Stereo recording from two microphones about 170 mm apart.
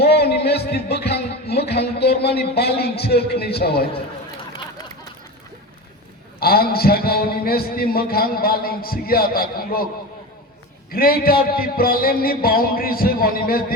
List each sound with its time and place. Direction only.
0.0 s music: 70° left (ahead or behind)
6.4 s a man's voice: 65° left (ahead or behind)
10.9 s a man's voice: 60° left (ahead or behind)